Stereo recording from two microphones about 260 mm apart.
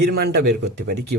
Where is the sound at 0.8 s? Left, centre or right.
Right.